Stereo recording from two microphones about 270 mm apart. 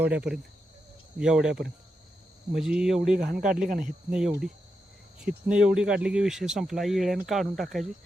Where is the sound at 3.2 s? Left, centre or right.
Right.